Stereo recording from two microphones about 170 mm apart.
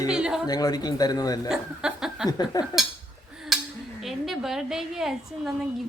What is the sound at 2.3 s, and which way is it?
Speech, 20° left (ahead or behind).